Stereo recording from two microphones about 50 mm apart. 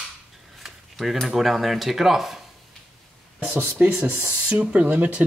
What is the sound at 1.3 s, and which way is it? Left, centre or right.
Speech, centre.